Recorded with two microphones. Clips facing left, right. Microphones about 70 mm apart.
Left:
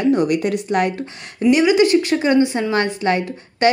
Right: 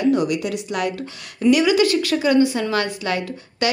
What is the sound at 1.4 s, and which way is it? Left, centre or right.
A woman's voice, left.